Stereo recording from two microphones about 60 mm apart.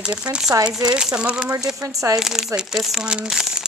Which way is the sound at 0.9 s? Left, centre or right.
Centre.